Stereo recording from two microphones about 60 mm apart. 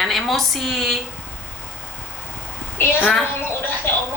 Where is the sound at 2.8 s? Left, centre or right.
Left.